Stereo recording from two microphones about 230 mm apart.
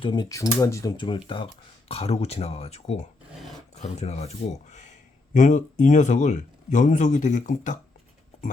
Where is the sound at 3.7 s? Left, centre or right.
Left.